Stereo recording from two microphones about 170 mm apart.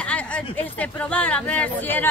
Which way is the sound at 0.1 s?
10° left (ahead or behind).